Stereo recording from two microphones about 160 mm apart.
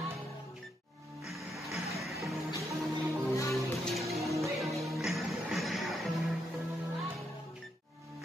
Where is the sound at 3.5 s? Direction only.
Centre (ahead or behind).